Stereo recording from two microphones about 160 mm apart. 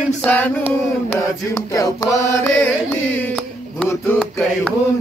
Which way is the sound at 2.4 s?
10° left (ahead or behind).